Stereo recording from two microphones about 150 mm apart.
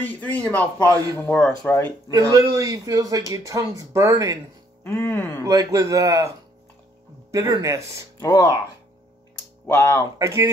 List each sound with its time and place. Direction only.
0.0 s a man's voice: 10° left (ahead or behind)
0.9 s speech: 25° right (ahead or behind)
1.2 s a man's voice: 15° left (ahead or behind)
2.0 s speech: 25° right (ahead or behind)
4.8 s a man's voice: 15° left (ahead or behind)
5.5 s speech: 25° right (ahead or behind)
8.2 s speech: 20° left (ahead or behind)
9.7 s speech: 20° left (ahead or behind)
10.1 s speech: 20° right (ahead or behind)